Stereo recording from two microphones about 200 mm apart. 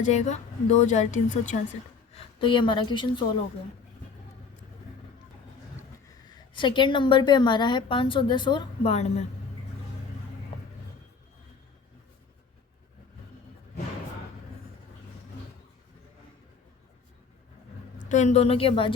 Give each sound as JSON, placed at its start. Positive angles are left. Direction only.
{"t": 0.0, "sound": "a woman's voice", "side_deg": 35}
{"t": 2.1, "sound": "a woman's voice", "side_deg": 25}
{"t": 6.2, "sound": "a woman's voice", "side_deg": 25}
{"t": 18.1, "sound": "a woman's voice", "side_deg": 35}